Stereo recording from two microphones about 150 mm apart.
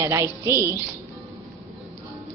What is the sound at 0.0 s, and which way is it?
Speech, 20° right (ahead or behind).